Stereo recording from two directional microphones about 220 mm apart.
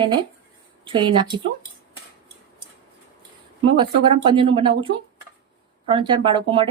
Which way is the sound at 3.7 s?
20° right (ahead or behind).